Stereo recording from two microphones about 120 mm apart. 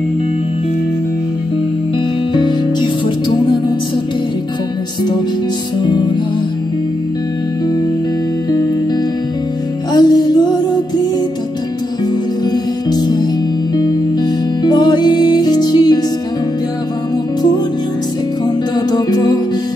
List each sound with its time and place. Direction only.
2.3 s music: 40° left (ahead or behind)
5.8 s music: 40° left (ahead or behind)
9.9 s music: 35° left (ahead or behind)
12.9 s music: 35° left (ahead or behind)
14.6 s music: 35° left (ahead or behind)
18.9 s music: 35° left (ahead or behind)